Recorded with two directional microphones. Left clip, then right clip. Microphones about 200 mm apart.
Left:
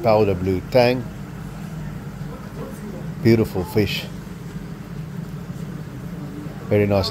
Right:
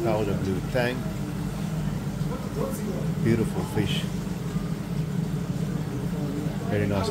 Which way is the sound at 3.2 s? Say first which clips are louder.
Left 9 dB; 35° left (ahead or behind).